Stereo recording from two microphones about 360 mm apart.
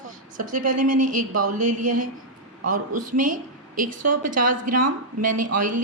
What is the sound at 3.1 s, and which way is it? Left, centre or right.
A woman's voice, right.